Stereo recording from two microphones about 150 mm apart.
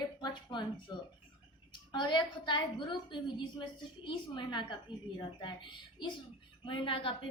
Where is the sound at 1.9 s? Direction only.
30° left (ahead or behind).